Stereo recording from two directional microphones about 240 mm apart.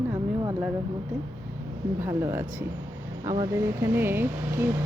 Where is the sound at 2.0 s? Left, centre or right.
Centre.